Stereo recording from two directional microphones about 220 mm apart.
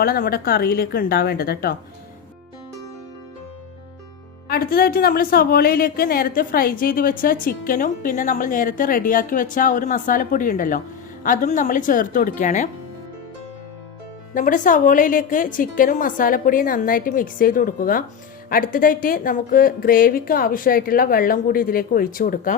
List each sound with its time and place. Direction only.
0.0 s a woman's voice: 40° left (ahead or behind)
4.4 s a woman's voice: 45° left (ahead or behind)
14.3 s a woman's voice: 35° left (ahead or behind)